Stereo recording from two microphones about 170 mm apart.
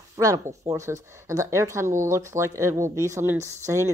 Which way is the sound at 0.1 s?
20° right (ahead or behind).